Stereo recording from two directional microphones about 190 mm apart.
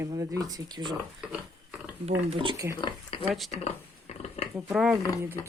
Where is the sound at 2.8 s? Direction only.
25° left (ahead or behind).